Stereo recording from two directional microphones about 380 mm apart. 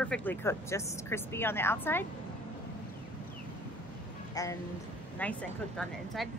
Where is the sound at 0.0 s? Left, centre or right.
Centre.